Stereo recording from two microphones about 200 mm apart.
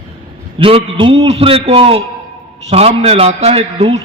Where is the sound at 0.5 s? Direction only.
25° right (ahead or behind).